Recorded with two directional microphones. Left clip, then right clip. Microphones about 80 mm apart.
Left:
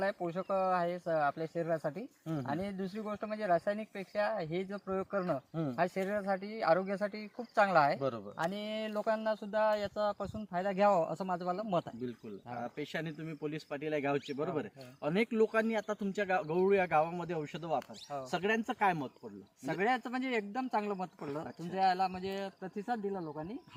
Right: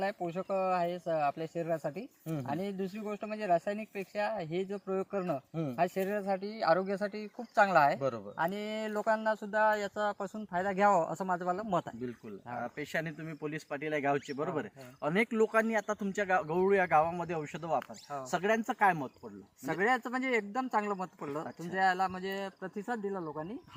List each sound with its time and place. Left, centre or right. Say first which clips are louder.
0.0 s speech: even; centre
6.4 s speech: right 2 dB; left
7.9 s a man's voice: right 2 dB; right
8.4 s speech: right 3 dB; left
9.7 s speech: right 1 dB; left
12.6 s speech: right 4 dB; right
13.4 s speech: right 2 dB; right
19.8 s speech: right 3 dB; left